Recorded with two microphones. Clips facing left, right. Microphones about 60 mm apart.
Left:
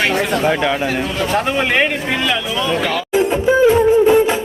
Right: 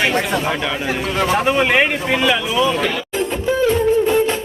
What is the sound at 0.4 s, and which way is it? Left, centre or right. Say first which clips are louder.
Speech: left 5 dB; left.